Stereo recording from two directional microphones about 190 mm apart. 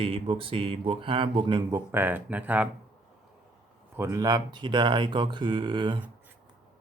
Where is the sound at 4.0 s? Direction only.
15° right (ahead or behind).